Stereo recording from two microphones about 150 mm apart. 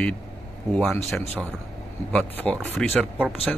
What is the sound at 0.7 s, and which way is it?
Speech, 5° left (ahead or behind).